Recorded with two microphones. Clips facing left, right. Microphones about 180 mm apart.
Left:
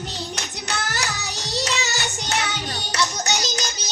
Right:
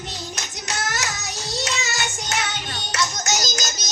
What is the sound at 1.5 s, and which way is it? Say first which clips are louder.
Child singing: left 2 dB; 35° left (ahead or behind).